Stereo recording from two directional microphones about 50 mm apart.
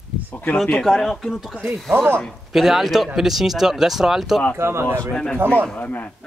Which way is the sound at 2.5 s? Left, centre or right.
Centre.